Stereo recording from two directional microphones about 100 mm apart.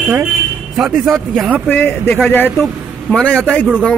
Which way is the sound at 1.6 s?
20° left (ahead or behind).